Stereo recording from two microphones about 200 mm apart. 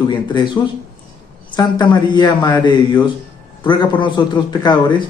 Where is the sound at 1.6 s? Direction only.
20° left (ahead or behind).